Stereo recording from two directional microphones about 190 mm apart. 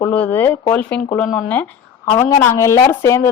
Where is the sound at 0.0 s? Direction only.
10° left (ahead or behind).